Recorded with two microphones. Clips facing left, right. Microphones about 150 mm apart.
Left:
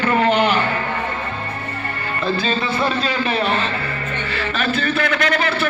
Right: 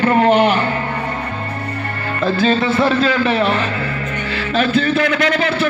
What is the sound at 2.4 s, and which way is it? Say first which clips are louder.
Speech: right 6 dB; 75° right (ahead or behind).